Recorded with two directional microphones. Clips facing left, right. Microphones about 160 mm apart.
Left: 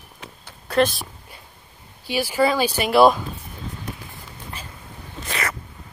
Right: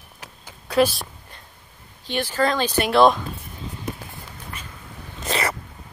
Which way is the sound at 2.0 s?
10° left (ahead or behind).